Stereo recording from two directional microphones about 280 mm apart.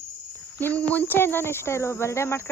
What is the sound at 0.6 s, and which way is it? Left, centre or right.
Speech, centre.